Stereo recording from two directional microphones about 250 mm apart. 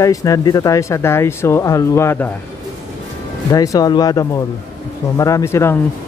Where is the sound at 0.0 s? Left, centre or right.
Centre.